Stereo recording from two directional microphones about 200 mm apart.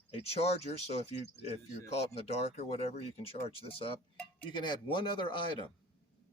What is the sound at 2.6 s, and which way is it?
Speech, 30° left (ahead or behind).